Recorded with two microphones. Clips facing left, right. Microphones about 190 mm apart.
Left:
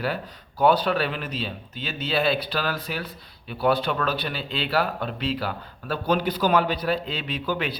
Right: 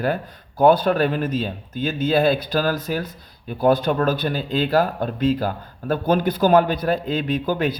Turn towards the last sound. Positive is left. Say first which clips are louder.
# right 6 dB
turn(degrees=-45)  # may be behind; listen again after turning